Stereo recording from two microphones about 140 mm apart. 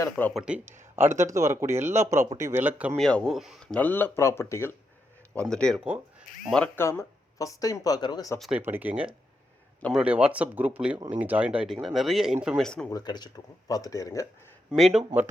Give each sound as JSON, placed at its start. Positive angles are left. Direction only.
{"t": 0.3, "sound": "a man's voice", "side_deg": -10}
{"t": 3.0, "sound": "speech", "side_deg": 5}
{"t": 5.3, "sound": "speech", "side_deg": 10}
{"t": 6.7, "sound": "speech", "side_deg": 20}
{"t": 8.4, "sound": "speech", "side_deg": -5}
{"t": 12.9, "sound": "speech", "side_deg": 30}
{"t": 14.7, "sound": "speech", "side_deg": 0}